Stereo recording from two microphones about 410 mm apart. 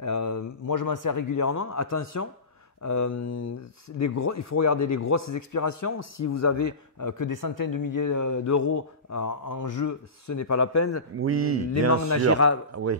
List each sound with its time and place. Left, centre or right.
0.0 s a man's voice: left
11.1 s speech: right
12.3 s speech: left